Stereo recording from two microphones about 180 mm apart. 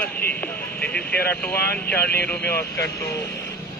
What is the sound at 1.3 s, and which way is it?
Speech, 10° left (ahead or behind).